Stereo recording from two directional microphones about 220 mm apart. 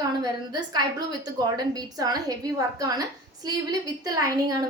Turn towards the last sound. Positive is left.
turn(degrees=-15)  # may be behind; listen again after turning